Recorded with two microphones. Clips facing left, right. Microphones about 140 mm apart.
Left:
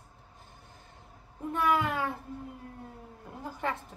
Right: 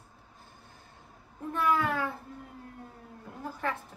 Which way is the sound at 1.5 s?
15° left (ahead or behind).